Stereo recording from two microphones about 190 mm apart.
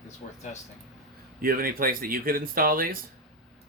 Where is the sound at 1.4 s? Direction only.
50° right (ahead or behind).